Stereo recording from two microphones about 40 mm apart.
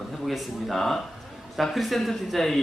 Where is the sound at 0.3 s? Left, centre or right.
Centre.